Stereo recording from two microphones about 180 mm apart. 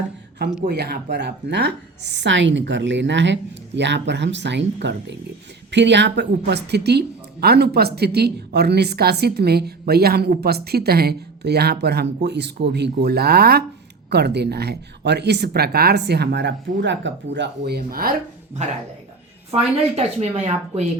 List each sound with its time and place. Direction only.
0.7 s a woman's voice: 60° right (ahead or behind)
19.5 s speech: 35° right (ahead or behind)